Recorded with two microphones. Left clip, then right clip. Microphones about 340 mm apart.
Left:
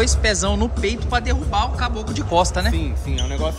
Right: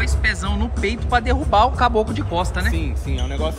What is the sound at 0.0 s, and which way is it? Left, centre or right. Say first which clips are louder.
Speech: left 3 dB; centre.